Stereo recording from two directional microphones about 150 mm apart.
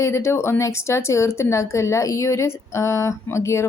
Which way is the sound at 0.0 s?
20° left (ahead or behind).